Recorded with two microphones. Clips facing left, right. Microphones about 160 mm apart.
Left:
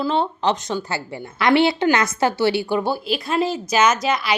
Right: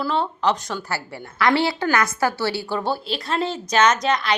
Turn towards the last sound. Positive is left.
turn(degrees=5)  # may be behind; listen again after turning